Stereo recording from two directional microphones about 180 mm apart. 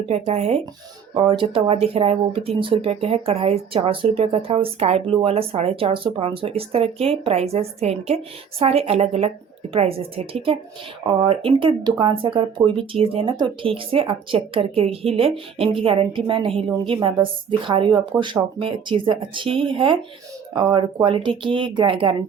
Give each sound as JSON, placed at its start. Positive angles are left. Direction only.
{"t": 0.0, "sound": "speech", "side_deg": -35}